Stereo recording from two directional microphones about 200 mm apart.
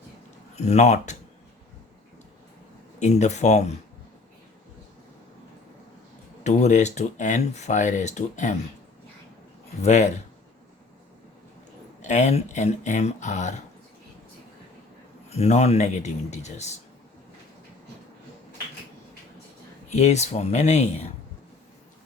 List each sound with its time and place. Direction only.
0.5 s speech: 35° left (ahead or behind)
3.0 s speech: 35° left (ahead or behind)
6.4 s speech: 35° left (ahead or behind)
9.8 s speech: 35° left (ahead or behind)
12.0 s speech: 35° left (ahead or behind)
15.3 s speech: 35° left (ahead or behind)
19.9 s speech: 35° left (ahead or behind)